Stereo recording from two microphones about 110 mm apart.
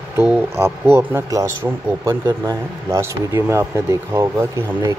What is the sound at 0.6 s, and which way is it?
Speech, 20° right (ahead or behind).